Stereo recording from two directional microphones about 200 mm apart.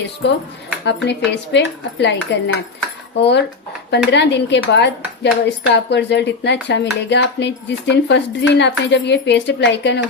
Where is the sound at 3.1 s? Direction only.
60° left (ahead or behind).